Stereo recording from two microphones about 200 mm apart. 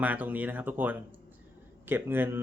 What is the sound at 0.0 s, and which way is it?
Speech, 10° right (ahead or behind).